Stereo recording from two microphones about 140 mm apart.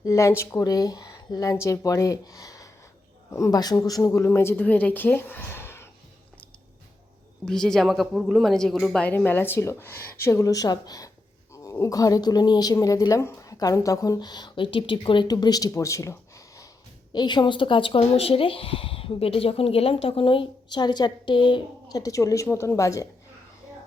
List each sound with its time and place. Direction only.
0.0 s a woman's voice: 20° left (ahead or behind)
7.4 s speech: 5° left (ahead or behind); by 23.0 s 20° left (ahead or behind)